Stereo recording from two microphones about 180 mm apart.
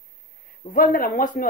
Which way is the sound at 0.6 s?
50° left (ahead or behind).